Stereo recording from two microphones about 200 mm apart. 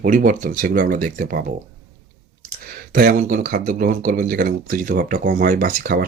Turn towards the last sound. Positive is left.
turn(degrees=-45)  # may be behind; listen again after turning